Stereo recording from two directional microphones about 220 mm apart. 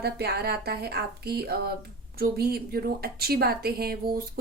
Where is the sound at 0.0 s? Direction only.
45° right (ahead or behind).